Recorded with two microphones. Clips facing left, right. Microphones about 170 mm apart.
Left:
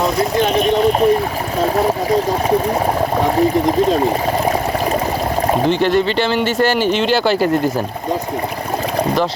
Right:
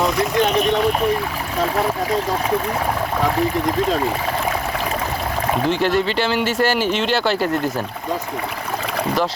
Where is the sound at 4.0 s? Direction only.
40° left (ahead or behind).